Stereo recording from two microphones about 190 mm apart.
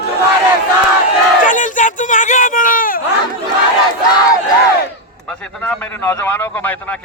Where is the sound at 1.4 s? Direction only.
45° left (ahead or behind).